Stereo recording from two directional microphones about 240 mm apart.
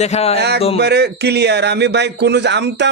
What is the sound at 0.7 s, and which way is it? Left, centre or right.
Speech, right.